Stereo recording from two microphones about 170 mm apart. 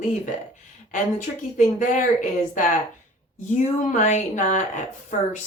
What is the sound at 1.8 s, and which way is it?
Speech, 50° left (ahead or behind).